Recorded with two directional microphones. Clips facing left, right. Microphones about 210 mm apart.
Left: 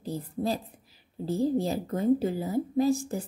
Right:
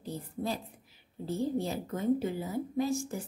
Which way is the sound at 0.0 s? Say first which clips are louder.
Left 5 dB; 35° left (ahead or behind).